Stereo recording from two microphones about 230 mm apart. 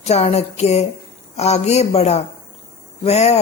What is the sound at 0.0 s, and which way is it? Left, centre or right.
A woman's voice, left.